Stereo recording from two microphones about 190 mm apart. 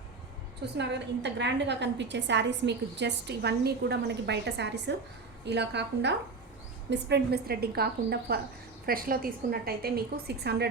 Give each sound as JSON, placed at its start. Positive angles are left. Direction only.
{"t": 0.6, "sound": "a woman's voice", "side_deg": -65}